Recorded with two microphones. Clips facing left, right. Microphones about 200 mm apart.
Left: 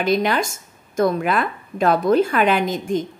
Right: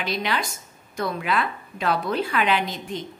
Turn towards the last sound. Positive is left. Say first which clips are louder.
# left 8 dB
turn(degrees=45)  # may be behind; listen again after turning